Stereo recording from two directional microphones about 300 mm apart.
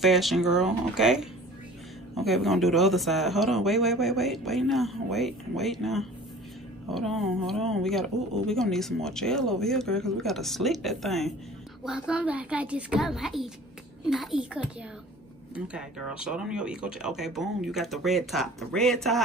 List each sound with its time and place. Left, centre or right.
0.0 s speech: centre